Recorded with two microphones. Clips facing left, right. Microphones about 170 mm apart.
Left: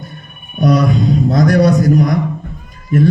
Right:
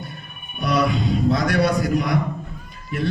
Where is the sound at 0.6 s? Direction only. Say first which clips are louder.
Left 7 dB; 45° left (ahead or behind).